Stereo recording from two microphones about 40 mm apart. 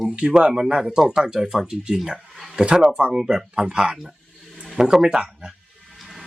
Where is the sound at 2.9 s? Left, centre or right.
Right.